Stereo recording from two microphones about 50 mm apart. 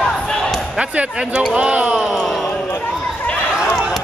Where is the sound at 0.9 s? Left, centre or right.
Right.